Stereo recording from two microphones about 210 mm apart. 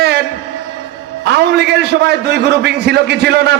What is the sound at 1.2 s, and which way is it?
A man's voice, 55° right (ahead or behind).